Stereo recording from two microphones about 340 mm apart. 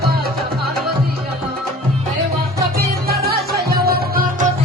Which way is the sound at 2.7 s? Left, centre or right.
Right.